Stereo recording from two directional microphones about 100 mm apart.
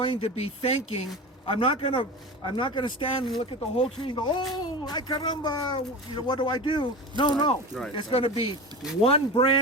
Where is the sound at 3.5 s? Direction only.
80° left.